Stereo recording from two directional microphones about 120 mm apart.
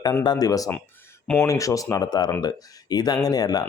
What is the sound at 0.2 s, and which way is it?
Speech, 35° left (ahead or behind).